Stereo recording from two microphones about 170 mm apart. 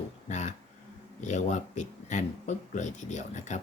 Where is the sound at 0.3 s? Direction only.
45° left (ahead or behind).